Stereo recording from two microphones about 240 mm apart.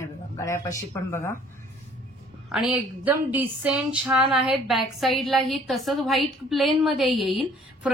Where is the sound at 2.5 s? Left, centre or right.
Centre.